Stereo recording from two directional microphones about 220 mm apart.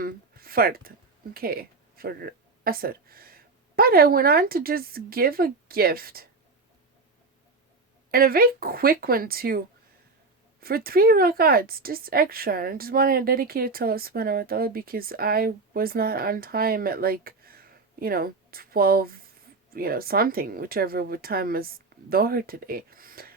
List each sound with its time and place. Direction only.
0.0 s speech: 40° right (ahead or behind)
8.1 s speech: 40° right (ahead or behind)
10.6 s speech: 40° right (ahead or behind)